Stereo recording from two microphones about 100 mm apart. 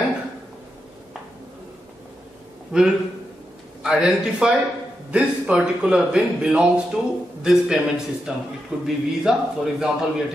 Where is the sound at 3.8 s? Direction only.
5° right (ahead or behind).